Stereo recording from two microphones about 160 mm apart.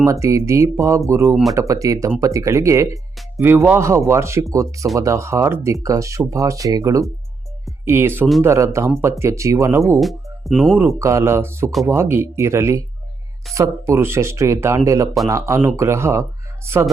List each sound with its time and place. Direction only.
0.0 s speech: 20° right (ahead or behind)
10.4 s speech: centre (ahead or behind)
11.0 s speech: 15° right (ahead or behind)